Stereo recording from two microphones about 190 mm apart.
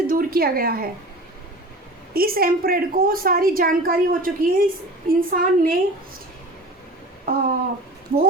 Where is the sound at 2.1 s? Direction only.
50° right (ahead or behind).